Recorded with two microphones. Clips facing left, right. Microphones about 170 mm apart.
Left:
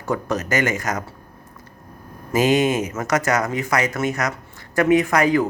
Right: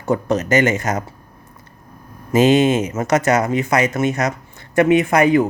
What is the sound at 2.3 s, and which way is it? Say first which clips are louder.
Speech: right 4 dB; 25° right (ahead or behind).